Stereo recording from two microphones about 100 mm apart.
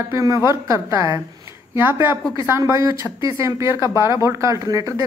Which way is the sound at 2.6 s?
30° right (ahead or behind).